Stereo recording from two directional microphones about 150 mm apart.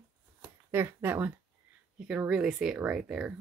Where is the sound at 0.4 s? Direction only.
15° right (ahead or behind).